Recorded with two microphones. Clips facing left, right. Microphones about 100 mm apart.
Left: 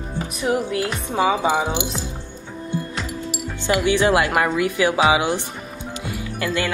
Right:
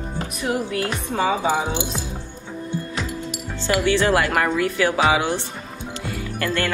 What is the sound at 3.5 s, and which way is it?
Speech, 15° left (ahead or behind).